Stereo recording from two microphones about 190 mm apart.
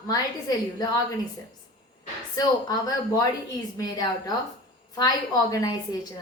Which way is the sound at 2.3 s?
20° left (ahead or behind).